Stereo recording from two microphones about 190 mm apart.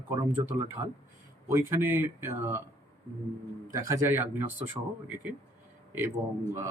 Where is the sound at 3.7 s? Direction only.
15° right (ahead or behind).